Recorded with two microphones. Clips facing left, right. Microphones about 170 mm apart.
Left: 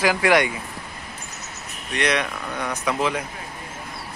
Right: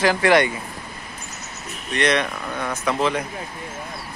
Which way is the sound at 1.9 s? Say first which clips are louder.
Right 2 dB; 10° left (ahead or behind).